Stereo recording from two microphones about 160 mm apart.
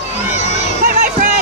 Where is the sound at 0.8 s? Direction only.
65° right (ahead or behind).